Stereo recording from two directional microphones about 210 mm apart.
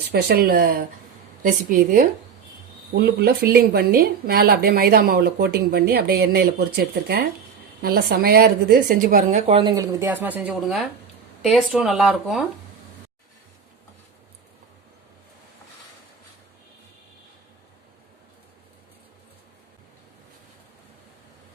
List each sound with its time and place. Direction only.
0.1 s a woman's voice: 50° right (ahead or behind)
2.9 s speech: 50° right (ahead or behind)
9.5 s speech: 25° right (ahead or behind); by 12.5 s 5° right (ahead or behind)